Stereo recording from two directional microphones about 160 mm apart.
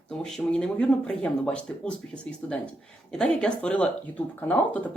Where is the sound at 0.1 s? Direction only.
5° left (ahead or behind).